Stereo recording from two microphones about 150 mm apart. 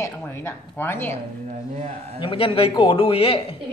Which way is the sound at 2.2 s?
35° left (ahead or behind).